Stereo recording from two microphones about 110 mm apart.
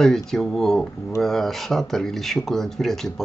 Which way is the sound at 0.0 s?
5° left (ahead or behind).